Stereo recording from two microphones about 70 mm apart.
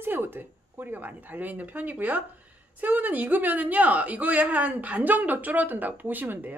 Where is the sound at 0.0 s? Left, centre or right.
Right.